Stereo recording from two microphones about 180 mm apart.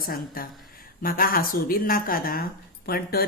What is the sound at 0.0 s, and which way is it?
A woman's voice, 55° left (ahead or behind).